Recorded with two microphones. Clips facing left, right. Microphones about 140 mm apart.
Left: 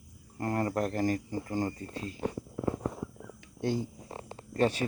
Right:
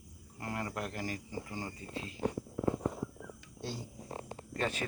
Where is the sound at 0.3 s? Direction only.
45° left (ahead or behind).